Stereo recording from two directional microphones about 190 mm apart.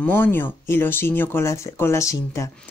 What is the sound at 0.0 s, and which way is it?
A woman's voice, 10° left (ahead or behind).